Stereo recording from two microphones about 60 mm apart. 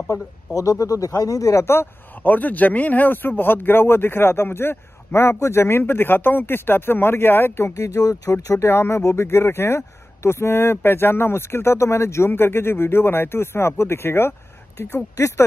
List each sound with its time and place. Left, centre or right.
0.6 s speech: left
2.1 s speech: left
8.0 s speech: left
8.6 s speech: left